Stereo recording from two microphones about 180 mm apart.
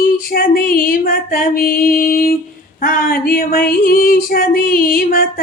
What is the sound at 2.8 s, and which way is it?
Female singing, 50° left (ahead or behind).